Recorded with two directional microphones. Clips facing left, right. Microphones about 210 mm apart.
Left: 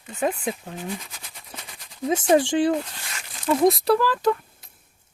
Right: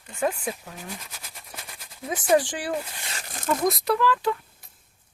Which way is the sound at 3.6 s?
30° left (ahead or behind).